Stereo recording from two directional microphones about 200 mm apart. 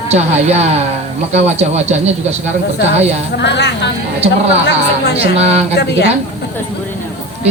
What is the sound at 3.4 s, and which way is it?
Speech, 60° left (ahead or behind).